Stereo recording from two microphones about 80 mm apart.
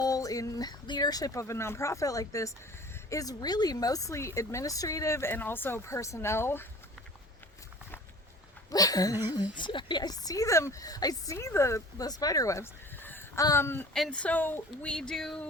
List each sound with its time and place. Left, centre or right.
0.0 s a sound: left
0.9 s speech: left
5.3 s speech: left
8.7 s speech: left
11.3 s speech: left
13.0 s a sound: left
13.6 s speech: left
13.9 s speech: centre; by 14.8 s left
14.8 s speech: centre